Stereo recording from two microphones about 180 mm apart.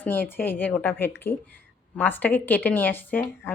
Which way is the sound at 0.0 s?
10° left (ahead or behind).